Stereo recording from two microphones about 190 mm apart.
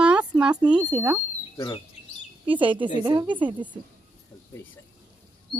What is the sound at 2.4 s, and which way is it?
A woman's voice, 25° right (ahead or behind).